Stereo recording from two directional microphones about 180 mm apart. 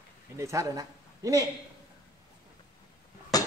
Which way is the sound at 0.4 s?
15° right (ahead or behind).